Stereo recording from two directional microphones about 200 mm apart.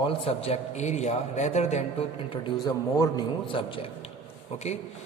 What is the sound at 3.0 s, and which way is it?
Speech, 25° left (ahead or behind).